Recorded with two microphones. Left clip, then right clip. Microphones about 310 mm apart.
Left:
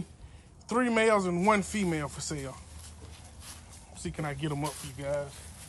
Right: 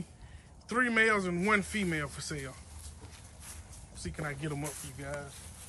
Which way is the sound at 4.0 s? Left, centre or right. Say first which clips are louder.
Left 3 dB; centre.